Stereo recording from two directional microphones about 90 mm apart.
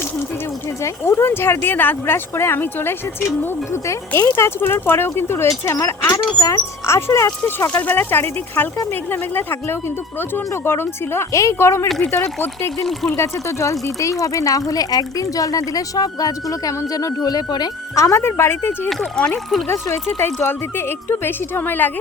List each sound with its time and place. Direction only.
0.8 s speech: 30° left (ahead or behind)
7.7 s speech: 20° left (ahead or behind)
11.9 s speech: 5° left (ahead or behind)
13.1 s speech: 35° left (ahead or behind); by 17.7 s 50° left (ahead or behind)
17.9 s speech: 35° left (ahead or behind)
18.9 s speech: 5° left (ahead or behind)
19.6 s speech: 30° left (ahead or behind)